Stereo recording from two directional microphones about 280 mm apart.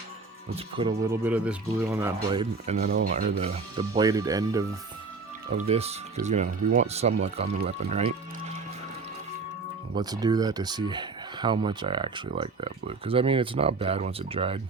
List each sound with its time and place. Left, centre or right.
0.5 s speech: centre
2.3 s speech: right
5.5 s speech: right
9.9 s speech: centre